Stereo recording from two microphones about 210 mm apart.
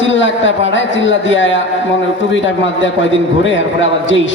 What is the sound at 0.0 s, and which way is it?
A man's voice, 60° left (ahead or behind).